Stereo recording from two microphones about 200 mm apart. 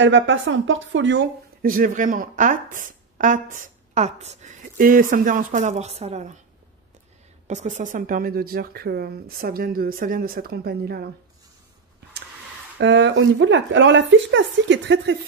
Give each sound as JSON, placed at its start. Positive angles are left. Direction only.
{"t": 0.0, "sound": "a woman's voice", "side_deg": -70}
{"t": 1.6, "sound": "speech", "side_deg": -45}
{"t": 7.4, "sound": "speech", "side_deg": -35}
{"t": 12.7, "sound": "a woman's voice", "side_deg": -65}